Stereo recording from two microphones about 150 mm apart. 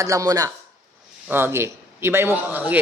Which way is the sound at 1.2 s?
15° right (ahead or behind).